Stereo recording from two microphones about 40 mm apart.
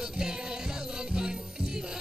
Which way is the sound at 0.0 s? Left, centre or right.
Centre.